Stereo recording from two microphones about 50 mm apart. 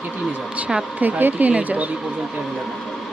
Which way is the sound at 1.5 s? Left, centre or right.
Right.